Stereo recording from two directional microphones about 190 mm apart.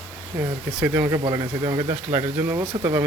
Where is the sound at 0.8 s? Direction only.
15° right (ahead or behind).